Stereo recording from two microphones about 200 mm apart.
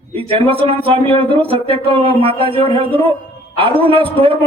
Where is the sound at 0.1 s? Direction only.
30° right (ahead or behind).